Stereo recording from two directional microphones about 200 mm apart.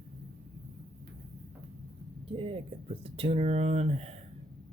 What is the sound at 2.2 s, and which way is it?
Speech, 25° right (ahead or behind).